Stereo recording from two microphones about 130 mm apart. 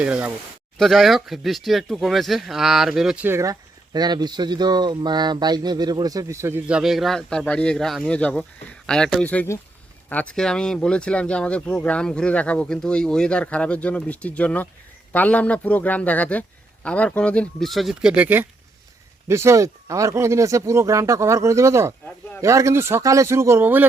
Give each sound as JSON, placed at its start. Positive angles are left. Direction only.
{"t": 0.0, "sound": "speech", "side_deg": -10}
{"t": 0.8, "sound": "speech", "side_deg": 0}
{"t": 3.2, "sound": "speech", "side_deg": -25}
{"t": 6.7, "sound": "speech", "side_deg": -5}